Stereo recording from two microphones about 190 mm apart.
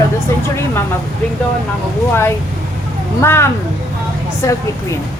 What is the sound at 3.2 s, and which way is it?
Speech, 15° left (ahead or behind).